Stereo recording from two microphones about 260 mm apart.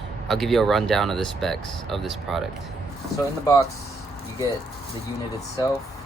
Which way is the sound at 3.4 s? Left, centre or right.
Centre.